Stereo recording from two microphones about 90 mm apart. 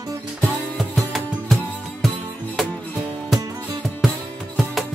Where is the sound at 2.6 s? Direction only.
Centre (ahead or behind).